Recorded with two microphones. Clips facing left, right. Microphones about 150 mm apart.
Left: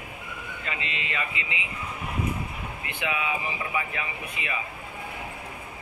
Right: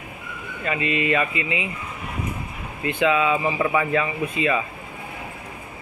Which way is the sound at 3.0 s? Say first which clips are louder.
Right 10 dB; 80° right.